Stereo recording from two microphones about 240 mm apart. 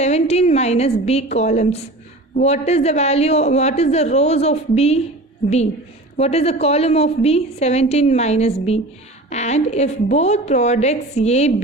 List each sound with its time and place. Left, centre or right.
0.0 s a woman's voice: left
6.1 s a woman's voice: left